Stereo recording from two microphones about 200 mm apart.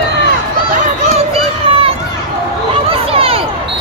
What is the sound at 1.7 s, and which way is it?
Run, 30° right (ahead or behind).